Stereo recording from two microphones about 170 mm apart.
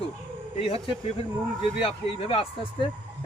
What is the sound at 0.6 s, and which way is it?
Speech, 35° left (ahead or behind).